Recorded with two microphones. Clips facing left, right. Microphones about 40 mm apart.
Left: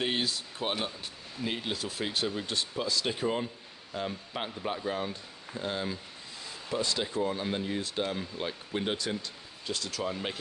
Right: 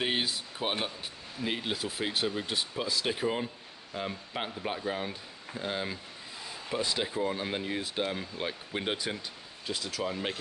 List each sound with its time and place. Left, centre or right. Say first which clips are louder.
0.0 s speech: even; centre